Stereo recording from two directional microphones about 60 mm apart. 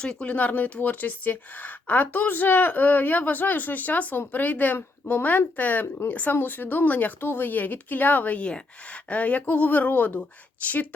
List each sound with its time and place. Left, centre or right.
0.0 s speech: centre